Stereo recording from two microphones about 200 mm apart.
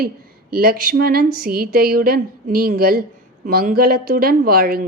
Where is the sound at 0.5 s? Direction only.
45° right (ahead or behind).